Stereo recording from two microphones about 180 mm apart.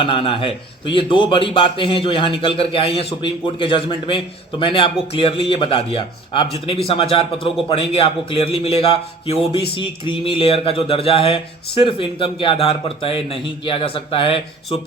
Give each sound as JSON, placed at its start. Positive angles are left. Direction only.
{"t": 0.0, "sound": "a man's voice", "side_deg": 30}